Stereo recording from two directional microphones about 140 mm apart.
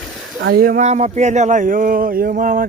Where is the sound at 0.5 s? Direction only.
90° right.